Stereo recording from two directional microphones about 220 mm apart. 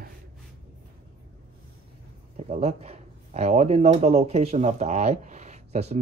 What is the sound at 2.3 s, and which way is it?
Speech, 30° right (ahead or behind).